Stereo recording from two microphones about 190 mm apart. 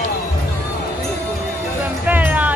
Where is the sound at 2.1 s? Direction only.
10° right (ahead or behind).